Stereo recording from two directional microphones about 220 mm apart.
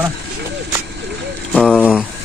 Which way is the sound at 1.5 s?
Centre (ahead or behind).